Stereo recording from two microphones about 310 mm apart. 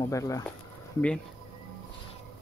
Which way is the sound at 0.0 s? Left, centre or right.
Centre.